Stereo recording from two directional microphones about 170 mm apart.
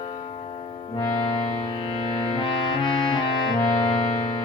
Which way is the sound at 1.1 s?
35° left (ahead or behind).